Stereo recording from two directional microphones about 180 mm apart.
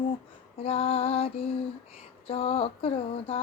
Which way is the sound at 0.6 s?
30° left (ahead or behind).